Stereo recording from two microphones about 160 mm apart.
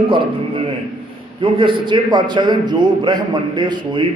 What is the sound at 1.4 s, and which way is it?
A man's voice, 30° right (ahead or behind).